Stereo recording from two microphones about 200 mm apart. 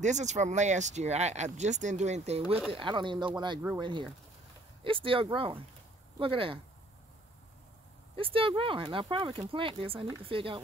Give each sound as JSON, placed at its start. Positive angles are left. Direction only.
{"t": 0.0, "sound": "speech", "side_deg": -35}
{"t": 2.4, "sound": "speech", "side_deg": -5}
{"t": 2.7, "sound": "speech", "side_deg": -25}
{"t": 8.2, "sound": "speech", "side_deg": -25}